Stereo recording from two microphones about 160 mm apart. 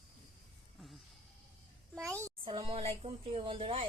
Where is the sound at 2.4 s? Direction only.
35° right (ahead or behind).